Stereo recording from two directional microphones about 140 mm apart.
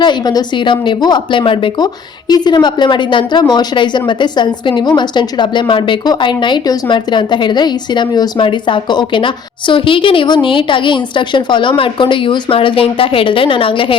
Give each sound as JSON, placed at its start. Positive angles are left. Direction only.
{"t": 0.0, "sound": "speech", "side_deg": 30}